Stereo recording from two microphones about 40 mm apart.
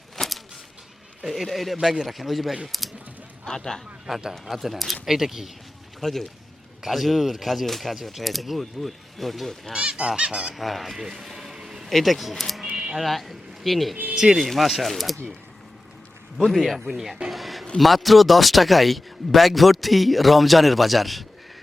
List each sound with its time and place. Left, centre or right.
0.2 s a sound: centre
1.2 s speech: centre
3.4 s speech: centre
4.1 s speech: centre
6.0 s speech: centre
9.7 s speech: right
10.5 s speech: centre
11.0 s vehicle: centre
11.9 s speech: centre
13.9 s a sound: right
14.3 s speech: centre
16.5 s speech: centre
17.3 s a sound: centre
17.7 s speech: centre